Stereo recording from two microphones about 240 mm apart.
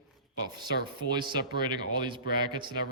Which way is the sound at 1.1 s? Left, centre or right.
Centre.